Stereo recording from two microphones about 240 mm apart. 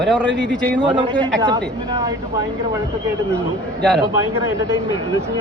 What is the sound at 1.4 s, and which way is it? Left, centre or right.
Speech, centre.